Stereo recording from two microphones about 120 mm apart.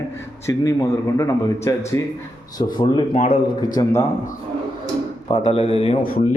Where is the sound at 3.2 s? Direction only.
60° left (ahead or behind).